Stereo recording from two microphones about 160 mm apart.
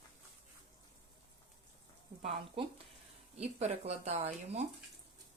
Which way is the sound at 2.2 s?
35° right (ahead or behind).